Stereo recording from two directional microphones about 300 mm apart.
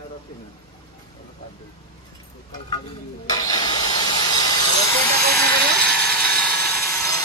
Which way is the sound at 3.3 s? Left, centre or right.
Centre.